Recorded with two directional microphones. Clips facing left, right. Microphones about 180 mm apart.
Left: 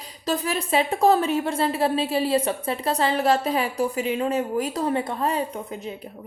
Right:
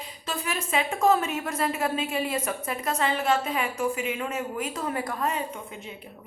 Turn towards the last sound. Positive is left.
turn(degrees=30)  # may be behind; listen again after turning